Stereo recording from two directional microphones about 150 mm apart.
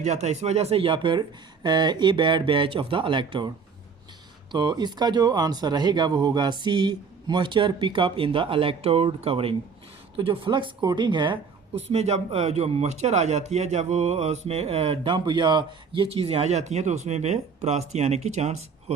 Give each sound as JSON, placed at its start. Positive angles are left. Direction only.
{"t": 0.0, "sound": "speech", "side_deg": -50}
{"t": 4.5, "sound": "speech", "side_deg": -30}
{"t": 11.7, "sound": "speech", "side_deg": -45}